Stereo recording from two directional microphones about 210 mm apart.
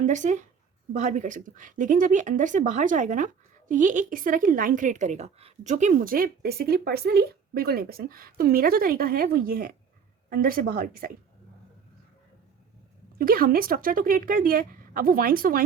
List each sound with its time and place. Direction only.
0.0 s speech: 35° right (ahead or behind)
13.1 s speech: 45° right (ahead or behind)